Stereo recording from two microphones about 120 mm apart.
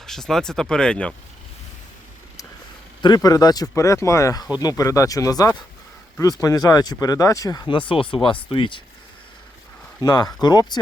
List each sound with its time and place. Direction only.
0.0 s speech: 5° left (ahead or behind)
3.2 s speech: 30° left (ahead or behind)
7.7 s speech: 45° left (ahead or behind)
10.0 s speech: 35° left (ahead or behind)